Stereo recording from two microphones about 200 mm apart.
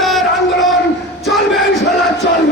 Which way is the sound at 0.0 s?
Centre (ahead or behind).